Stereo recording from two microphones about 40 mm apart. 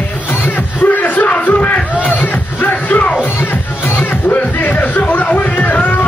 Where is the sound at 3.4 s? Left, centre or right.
Left.